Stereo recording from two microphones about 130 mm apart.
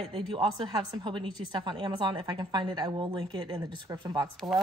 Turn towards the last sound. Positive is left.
turn(degrees=0)  # may be behind; listen again after turning